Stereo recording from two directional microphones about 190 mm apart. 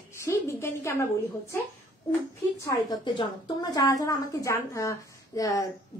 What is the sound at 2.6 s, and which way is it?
A woman's voice, 20° left (ahead or behind).